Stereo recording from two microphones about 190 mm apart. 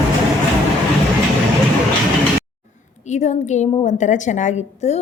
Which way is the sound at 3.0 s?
40° left (ahead or behind).